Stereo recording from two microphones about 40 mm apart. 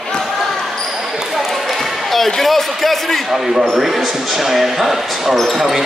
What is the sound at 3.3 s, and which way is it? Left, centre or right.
Basketball bounce, centre.